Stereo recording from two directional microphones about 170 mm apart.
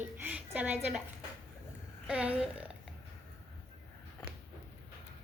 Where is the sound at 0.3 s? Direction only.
10° right (ahead or behind).